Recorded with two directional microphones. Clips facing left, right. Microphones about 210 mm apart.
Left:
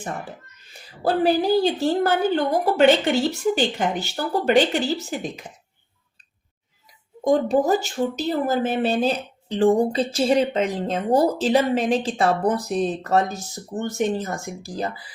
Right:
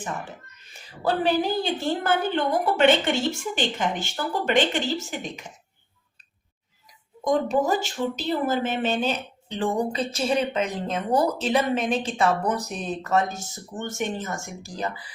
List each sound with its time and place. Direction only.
1.2 s a woman's voice: 35° left (ahead or behind)
7.3 s a woman's voice: 35° left (ahead or behind)